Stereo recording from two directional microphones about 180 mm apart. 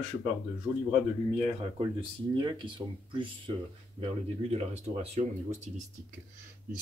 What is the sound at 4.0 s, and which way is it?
A man's voice, 35° right (ahead or behind).